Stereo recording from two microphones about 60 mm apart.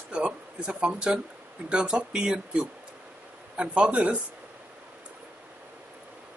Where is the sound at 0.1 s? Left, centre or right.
Centre.